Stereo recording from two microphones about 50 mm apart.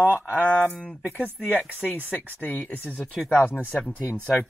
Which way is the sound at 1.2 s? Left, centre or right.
Right.